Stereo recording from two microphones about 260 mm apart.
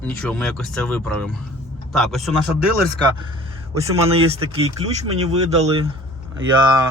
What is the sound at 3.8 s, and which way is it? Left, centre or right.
Speech, right.